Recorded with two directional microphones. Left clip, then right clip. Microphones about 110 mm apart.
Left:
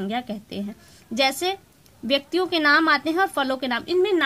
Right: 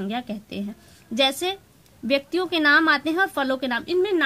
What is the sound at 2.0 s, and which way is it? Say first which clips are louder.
A woman's voice: left 1 dB; 45° left (ahead or behind).